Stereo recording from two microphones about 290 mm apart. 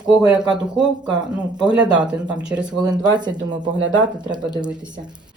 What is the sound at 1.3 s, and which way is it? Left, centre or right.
Speech, centre.